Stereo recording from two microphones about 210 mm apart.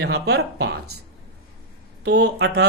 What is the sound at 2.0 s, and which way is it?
Speech, 50° right (ahead or behind).